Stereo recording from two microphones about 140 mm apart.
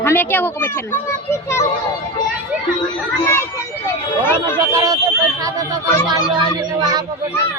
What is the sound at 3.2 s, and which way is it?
Speech, 15° left (ahead or behind).